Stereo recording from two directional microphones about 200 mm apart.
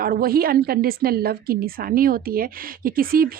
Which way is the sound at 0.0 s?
50° right (ahead or behind).